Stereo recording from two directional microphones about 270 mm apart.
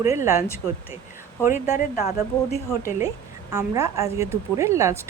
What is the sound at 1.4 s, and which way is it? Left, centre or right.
Speech, left.